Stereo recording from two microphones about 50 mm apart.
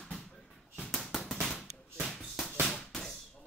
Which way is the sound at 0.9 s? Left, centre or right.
Centre.